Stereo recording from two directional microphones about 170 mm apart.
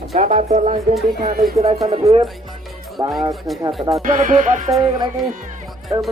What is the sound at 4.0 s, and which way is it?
Speech, 50° right (ahead or behind).